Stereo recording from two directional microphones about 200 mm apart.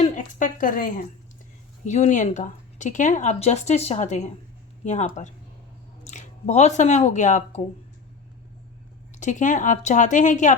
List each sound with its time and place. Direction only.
0.2 s speech: 40° left (ahead or behind)
9.1 s speech: 40° left (ahead or behind)